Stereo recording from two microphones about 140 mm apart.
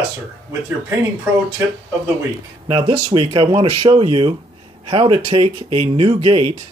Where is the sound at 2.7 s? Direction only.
40° right (ahead or behind).